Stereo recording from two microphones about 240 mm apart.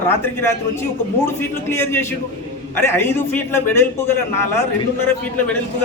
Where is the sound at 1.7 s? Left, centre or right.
Centre.